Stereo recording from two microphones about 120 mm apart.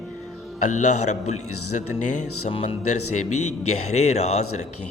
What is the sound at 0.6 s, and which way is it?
A man's voice, 85° left.